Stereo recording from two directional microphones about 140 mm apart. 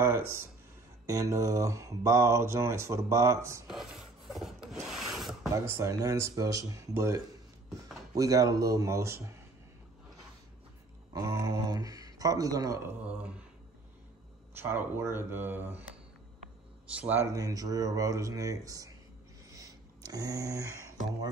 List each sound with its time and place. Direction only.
0.0 s speech: 20° right (ahead or behind)
3.6 s filing: 5° right (ahead or behind)
4.8 s rub: 5° right (ahead or behind)
5.5 s speech: 20° right (ahead or behind)
11.1 s speech: 20° right (ahead or behind)
14.5 s speech: 15° right (ahead or behind)
16.9 s speech: 10° right (ahead or behind)
19.5 s a sound: 25° right (ahead or behind)